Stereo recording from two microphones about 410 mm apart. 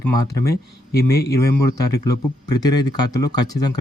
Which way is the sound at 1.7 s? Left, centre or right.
Centre.